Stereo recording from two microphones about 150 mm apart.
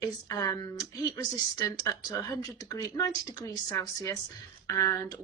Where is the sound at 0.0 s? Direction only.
25° left (ahead or behind).